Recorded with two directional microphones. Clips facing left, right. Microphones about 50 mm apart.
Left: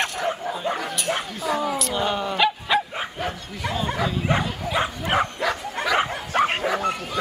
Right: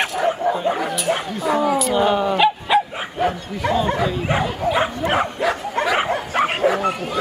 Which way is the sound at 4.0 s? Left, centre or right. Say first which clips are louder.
Right 3 dB; centre.